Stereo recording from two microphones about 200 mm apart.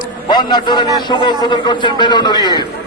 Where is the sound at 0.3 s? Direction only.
20° left (ahead or behind).